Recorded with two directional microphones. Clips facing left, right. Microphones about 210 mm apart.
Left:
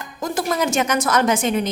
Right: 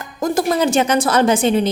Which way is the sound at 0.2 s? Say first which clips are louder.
Right 5 dB; 35° right (ahead or behind).